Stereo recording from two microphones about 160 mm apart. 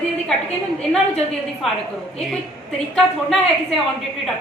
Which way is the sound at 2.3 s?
5° left (ahead or behind).